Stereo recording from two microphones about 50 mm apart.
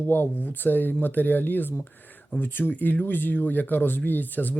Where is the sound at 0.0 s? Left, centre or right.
Left.